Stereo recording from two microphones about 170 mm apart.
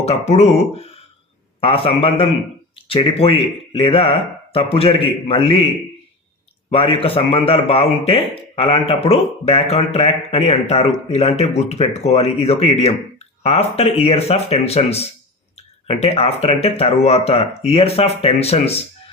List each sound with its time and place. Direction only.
0.0 s a man's voice: 40° left (ahead or behind)
6.7 s a man's voice: 35° left (ahead or behind)